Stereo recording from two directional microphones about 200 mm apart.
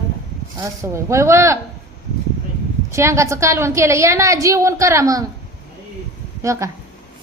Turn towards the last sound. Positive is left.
turn(degrees=-15)  # may be behind; listen again after turning